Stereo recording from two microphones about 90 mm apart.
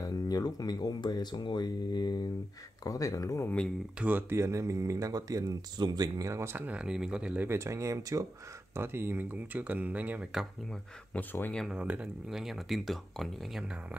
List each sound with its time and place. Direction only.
0.0 s speech: 45° left (ahead or behind)
4.0 s speech: 20° right (ahead or behind)
4.4 s speech: 35° right (ahead or behind)
5.8 s speech: 50° right (ahead or behind)
6.5 s speech: 15° right (ahead or behind)
7.4 s speech: 30° right (ahead or behind)
8.7 s speech: 25° right (ahead or behind)
10.3 s speech: 5° right (ahead or behind)
11.1 s speech: 20° left (ahead or behind)
11.7 s speech: 15° right (ahead or behind)
12.3 s speech: 5° right (ahead or behind)